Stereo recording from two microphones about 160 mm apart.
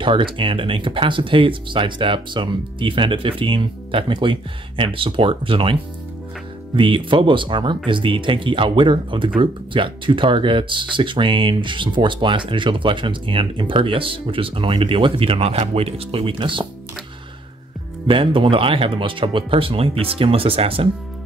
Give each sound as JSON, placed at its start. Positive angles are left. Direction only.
{"t": 0.0, "sound": "speech", "side_deg": -30}
{"t": 6.8, "sound": "speech", "side_deg": -30}
{"t": 18.0, "sound": "speech", "side_deg": -30}